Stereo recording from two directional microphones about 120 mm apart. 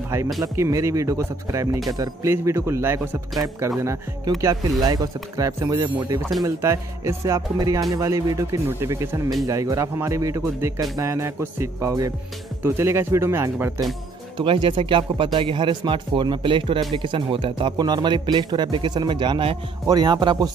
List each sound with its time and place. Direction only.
0.4 s speech: 30° right (ahead or behind)
14.4 s speech: 45° right (ahead or behind)